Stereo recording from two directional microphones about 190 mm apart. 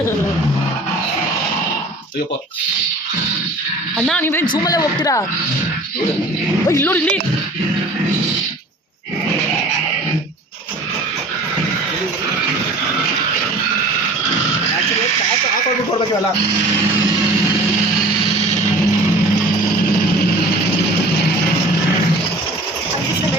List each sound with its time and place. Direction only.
3.9 s speech: centre (ahead or behind)
4.2 s speech: 10° left (ahead or behind)
6.7 s speech: 15° left (ahead or behind)